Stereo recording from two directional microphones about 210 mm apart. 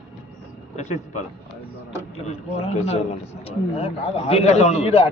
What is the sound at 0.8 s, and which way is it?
A man's voice, 35° left (ahead or behind).